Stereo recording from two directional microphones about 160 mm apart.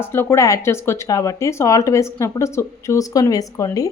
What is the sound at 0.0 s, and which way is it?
A woman's voice, 15° left (ahead or behind).